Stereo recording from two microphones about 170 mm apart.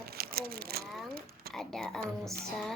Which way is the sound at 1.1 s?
65° right (ahead or behind).